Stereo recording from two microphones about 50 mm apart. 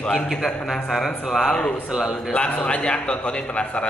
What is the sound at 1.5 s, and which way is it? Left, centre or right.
Speech, centre.